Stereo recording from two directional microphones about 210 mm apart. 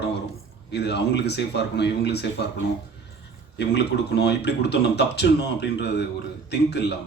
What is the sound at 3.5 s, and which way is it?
Speech, 55° left (ahead or behind).